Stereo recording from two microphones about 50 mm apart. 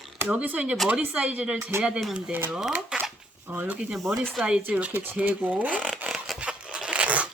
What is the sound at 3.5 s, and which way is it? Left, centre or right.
Speech, right.